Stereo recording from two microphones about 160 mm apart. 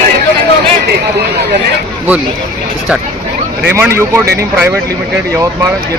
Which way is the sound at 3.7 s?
15° right (ahead or behind).